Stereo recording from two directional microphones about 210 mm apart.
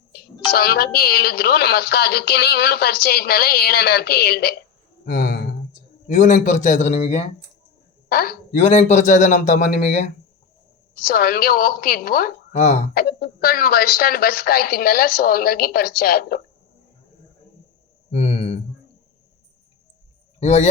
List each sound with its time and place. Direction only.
0.5 s a woman's voice: 45° left (ahead or behind)
5.0 s a sound: 40° left (ahead or behind)
6.1 s speech: 35° left (ahead or behind)
8.1 s a woman's voice: 45° left (ahead or behind)
8.5 s a woman's voice: 30° left (ahead or behind)
18.1 s speech: 30° left (ahead or behind)
20.4 s speech: 30° left (ahead or behind)